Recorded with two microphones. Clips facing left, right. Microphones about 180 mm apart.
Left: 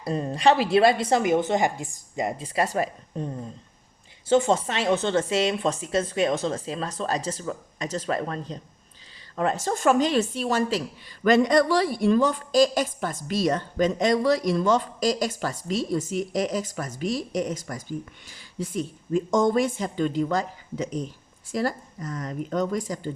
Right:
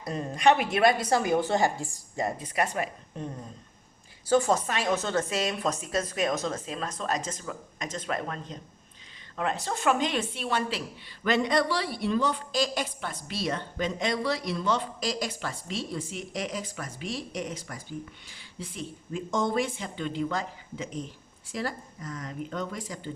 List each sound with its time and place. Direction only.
0.0 s a woman's voice: 30° left (ahead or behind)
2.4 s speech: 35° left (ahead or behind)
4.3 s a woman's voice: 25° left (ahead or behind); by 23.1 s 45° left (ahead or behind)